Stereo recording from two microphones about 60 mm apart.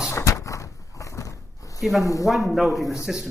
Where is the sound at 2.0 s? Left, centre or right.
Left.